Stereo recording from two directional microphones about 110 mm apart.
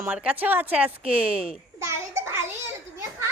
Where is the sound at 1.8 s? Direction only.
25° right (ahead or behind).